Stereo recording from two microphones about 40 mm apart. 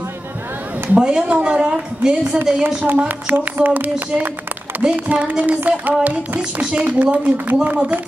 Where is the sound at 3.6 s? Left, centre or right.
Right.